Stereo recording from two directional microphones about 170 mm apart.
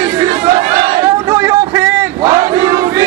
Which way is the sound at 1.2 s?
20° right (ahead or behind).